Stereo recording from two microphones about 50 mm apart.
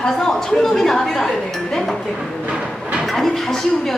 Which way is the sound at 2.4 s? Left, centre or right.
Centre.